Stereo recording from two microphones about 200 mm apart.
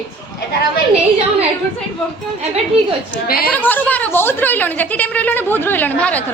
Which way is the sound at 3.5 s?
10° left (ahead or behind).